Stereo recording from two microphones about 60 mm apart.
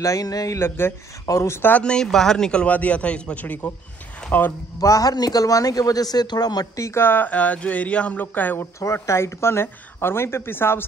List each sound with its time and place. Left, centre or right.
0.0 s speech: left
0.6 s speech: left
1.2 s speech: left
1.8 s speech: centre
4.3 s a man's voice: left
4.7 s speech: left
6.9 s speech: left
7.2 s speech: left
8.7 s speech: left